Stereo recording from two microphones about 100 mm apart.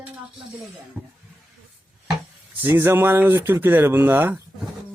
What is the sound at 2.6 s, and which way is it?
Speech, 25° right (ahead or behind).